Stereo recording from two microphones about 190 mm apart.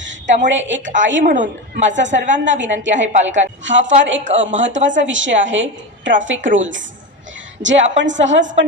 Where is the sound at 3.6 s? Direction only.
75° right (ahead or behind).